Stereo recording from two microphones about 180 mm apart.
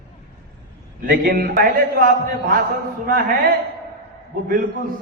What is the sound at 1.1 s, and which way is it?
A man's voice, 55° right (ahead or behind).